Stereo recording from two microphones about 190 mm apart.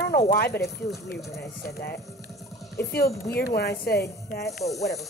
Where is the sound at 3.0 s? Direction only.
15° left (ahead or behind).